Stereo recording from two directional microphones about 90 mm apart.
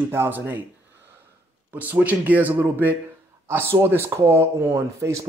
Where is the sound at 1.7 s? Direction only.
20° right (ahead or behind).